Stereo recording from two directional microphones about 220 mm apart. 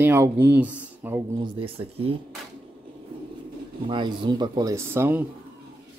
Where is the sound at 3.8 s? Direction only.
20° right (ahead or behind).